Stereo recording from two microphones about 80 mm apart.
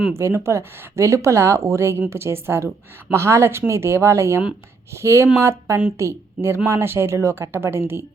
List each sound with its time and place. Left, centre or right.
0.1 s a woman's voice: right